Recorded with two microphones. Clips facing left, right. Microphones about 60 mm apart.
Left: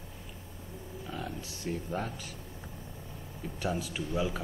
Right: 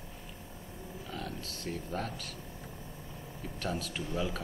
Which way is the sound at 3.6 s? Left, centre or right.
Centre.